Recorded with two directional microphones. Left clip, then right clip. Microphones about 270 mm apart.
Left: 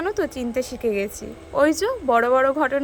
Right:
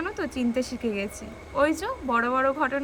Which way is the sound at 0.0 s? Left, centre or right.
Left.